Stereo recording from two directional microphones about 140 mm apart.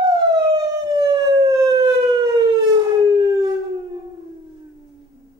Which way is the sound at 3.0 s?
30° right (ahead or behind).